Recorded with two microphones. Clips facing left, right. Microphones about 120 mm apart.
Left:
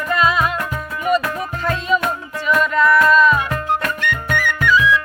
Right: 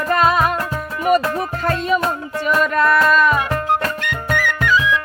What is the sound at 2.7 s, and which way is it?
Music, 60° right (ahead or behind).